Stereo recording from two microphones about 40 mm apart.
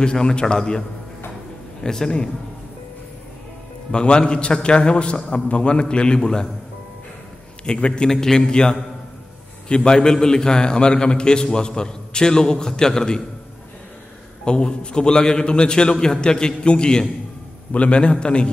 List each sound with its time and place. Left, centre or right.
0.0 s a man's voice: left
3.9 s a man's voice: left
7.6 s a man's voice: left
14.4 s a man's voice: left